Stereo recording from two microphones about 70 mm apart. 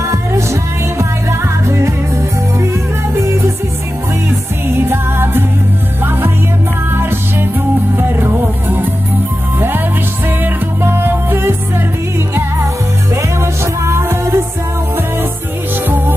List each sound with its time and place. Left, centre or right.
0.1 s music: right
4.7 s music: right
6.9 s music: right
10.4 s music: right
13.1 s music: right